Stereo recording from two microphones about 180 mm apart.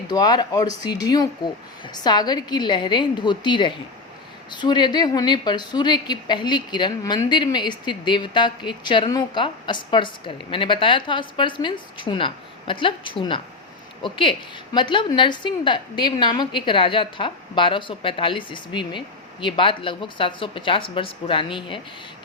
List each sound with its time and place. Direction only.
0.1 s a woman's voice: 25° left (ahead or behind)